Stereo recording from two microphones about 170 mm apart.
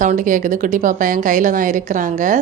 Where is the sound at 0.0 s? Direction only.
50° right (ahead or behind).